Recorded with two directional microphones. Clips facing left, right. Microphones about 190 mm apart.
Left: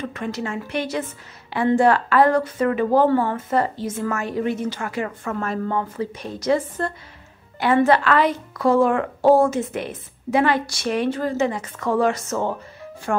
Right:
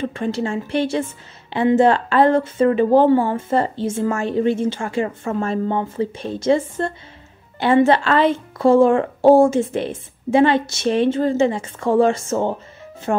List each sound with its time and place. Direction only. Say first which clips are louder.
0.0 s a woman's voice: right 5 dB; 30° right (ahead or behind)
3.1 s speech: right 4 dB; 15° right (ahead or behind)
3.3 s a woman's voice: right 2 dB; 25° right (ahead or behind)